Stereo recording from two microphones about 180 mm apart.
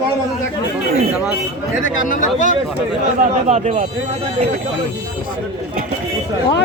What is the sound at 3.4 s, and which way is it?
Speech, 40° right (ahead or behind).